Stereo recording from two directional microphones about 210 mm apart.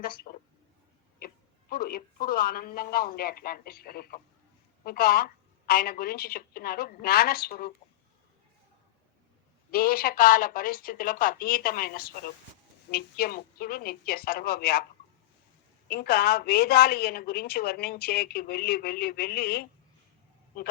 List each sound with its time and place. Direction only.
0.0 s a sound: 45° left (ahead or behind)
1.7 s a woman's voice: 45° left (ahead or behind)
9.7 s a woman's voice: 45° left (ahead or behind)
15.9 s a woman's voice: 50° left (ahead or behind)